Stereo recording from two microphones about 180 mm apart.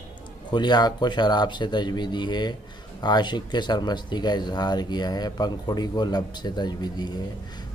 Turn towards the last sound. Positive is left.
turn(degrees=25)  # may be behind; listen again after turning